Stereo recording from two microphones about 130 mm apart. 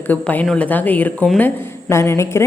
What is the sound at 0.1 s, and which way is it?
A woman's voice, 10° left (ahead or behind).